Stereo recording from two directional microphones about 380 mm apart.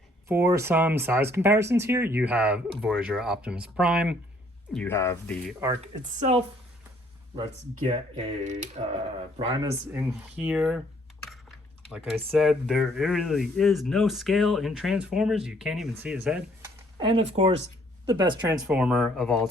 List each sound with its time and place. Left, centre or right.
0.3 s speech: centre
5.5 s speech: centre
8.1 s speech: centre
11.9 s speech: centre
17.0 s speech: centre